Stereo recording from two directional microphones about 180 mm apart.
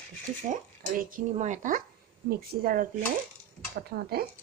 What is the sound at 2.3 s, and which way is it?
Speech, 60° right (ahead or behind).